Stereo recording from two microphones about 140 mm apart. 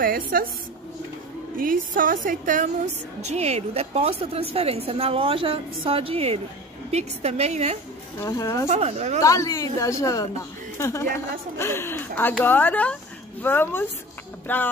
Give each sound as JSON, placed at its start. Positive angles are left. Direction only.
{"t": 0.0, "sound": "a woman's voice", "side_deg": -90}
{"t": 1.6, "sound": "a woman's voice", "side_deg": -80}
{"t": 8.2, "sound": "a woman's voice", "side_deg": 20}
{"t": 8.6, "sound": "a woman's voice", "side_deg": -55}
{"t": 9.2, "sound": "a woman's voice", "side_deg": 20}